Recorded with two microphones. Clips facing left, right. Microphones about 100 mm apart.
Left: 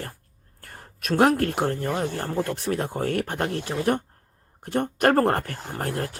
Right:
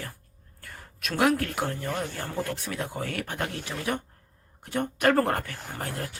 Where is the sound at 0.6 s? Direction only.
45° left (ahead or behind).